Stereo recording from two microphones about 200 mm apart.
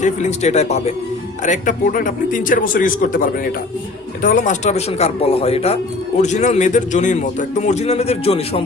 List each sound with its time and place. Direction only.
0.0 s speech: 35° left (ahead or behind)